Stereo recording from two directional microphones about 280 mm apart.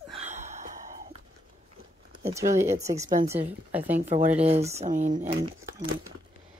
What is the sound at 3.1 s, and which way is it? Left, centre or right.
Speech, right.